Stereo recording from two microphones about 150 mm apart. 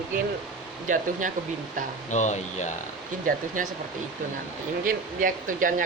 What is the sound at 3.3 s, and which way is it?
Speech, 60° right (ahead or behind).